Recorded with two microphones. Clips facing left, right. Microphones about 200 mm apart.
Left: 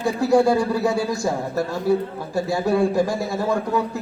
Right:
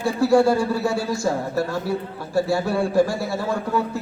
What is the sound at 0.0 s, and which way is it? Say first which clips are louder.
A man's voice: even; 20° left (ahead or behind).